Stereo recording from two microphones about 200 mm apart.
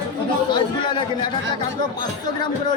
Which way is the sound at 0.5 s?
25° left (ahead or behind).